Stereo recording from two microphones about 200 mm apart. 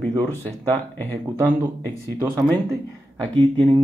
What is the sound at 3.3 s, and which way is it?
Speech, 25° right (ahead or behind).